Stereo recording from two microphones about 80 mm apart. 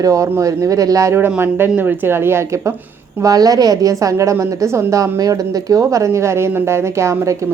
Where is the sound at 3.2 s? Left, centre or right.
Right.